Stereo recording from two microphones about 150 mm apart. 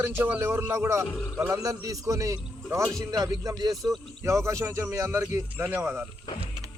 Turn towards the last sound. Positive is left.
turn(degrees=-10)  # may be behind; listen again after turning